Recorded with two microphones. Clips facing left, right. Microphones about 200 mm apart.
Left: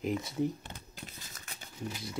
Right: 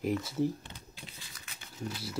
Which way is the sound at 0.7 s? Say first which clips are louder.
Left 2 dB; 45° left (ahead or behind).